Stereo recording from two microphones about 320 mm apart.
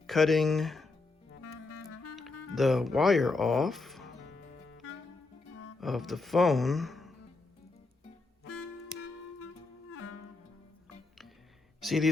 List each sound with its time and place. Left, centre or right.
0.1 s speech: centre
1.3 s music: left
2.6 s speech: centre
4.2 s music: left
5.8 s speech: centre
11.8 s a sound: centre